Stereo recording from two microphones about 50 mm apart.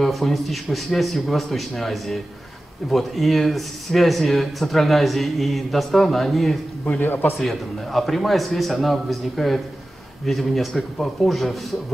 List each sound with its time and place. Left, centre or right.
0.0 s speech: centre
7.0 s a man's voice: left
7.3 s speech: centre